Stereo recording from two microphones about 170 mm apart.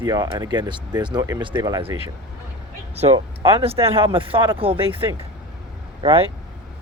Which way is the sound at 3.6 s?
35° right (ahead or behind).